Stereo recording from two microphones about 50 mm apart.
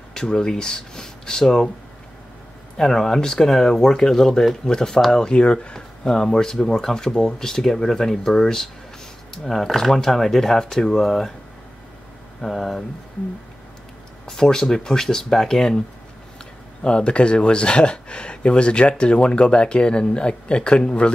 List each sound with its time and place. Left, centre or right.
0.1 s speech: centre
2.8 s speech: centre
12.4 s speech: centre
14.2 s speech: centre
16.8 s speech: left